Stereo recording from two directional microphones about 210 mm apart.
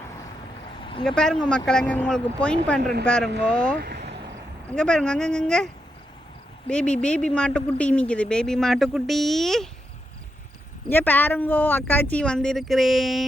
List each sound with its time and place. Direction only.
1.0 s speech: 5° left (ahead or behind)
2.8 s speech: 50° right (ahead or behind)
3.4 s speech: 5° left (ahead or behind)
3.8 s vehicle: 50° right (ahead or behind)
4.7 s speech: 5° left (ahead or behind)
6.7 s speech: 5° left (ahead or behind)
10.8 s speech: 10° left (ahead or behind)